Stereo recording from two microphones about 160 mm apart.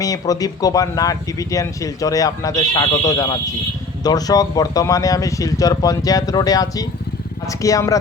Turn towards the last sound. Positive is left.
turn(degrees=20)  # may be behind; listen again after turning